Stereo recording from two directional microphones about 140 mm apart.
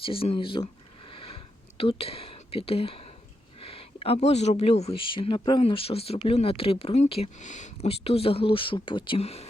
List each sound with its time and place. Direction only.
0.0 s a sound: 40° left (ahead or behind)
1.8 s speech: 40° left (ahead or behind)
7.3 s speech: 60° left (ahead or behind)